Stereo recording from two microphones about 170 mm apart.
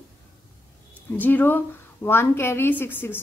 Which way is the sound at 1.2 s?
10° left (ahead or behind).